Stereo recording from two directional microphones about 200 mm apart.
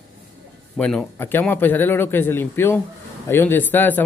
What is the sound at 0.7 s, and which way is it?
Speech, 5° left (ahead or behind).